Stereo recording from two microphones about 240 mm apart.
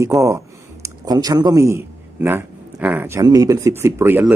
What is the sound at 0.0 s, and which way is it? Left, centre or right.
Speech, centre.